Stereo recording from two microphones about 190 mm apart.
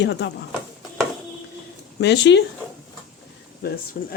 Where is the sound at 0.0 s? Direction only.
65° left (ahead or behind).